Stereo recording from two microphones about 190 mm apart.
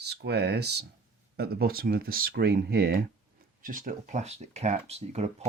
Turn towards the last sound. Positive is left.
turn(degrees=-35)  # may be behind; listen again after turning